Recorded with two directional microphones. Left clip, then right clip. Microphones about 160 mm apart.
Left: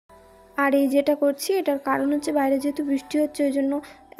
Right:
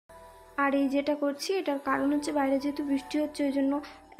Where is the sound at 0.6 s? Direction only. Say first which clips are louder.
Left 7 dB; 35° left (ahead or behind).